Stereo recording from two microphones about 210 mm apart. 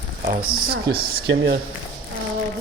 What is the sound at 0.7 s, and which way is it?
Speech, 45° right (ahead or behind).